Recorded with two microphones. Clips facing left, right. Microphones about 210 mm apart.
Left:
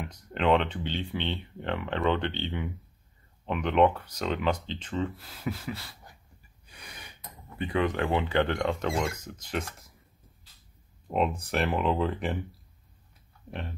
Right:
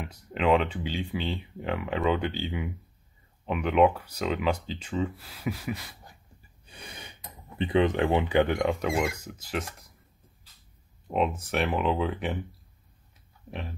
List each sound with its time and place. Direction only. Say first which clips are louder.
0.0 s speech: right 1 dB; 5° right (ahead or behind)
6.7 s gasp: right 4 dB; 25° right (ahead or behind)
7.5 s speech: right 4 dB; 20° right (ahead or behind); by 9.9 s centre (ahead or behind)
11.1 s speech: right 1 dB; centre (ahead or behind)
13.5 s speech: even; centre (ahead or behind)